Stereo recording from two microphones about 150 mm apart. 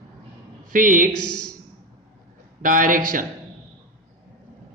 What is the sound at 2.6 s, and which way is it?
Speech, 65° right (ahead or behind).